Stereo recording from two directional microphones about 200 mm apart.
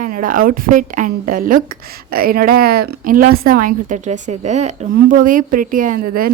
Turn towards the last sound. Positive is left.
turn(degrees=-45)  # may be behind; listen again after turning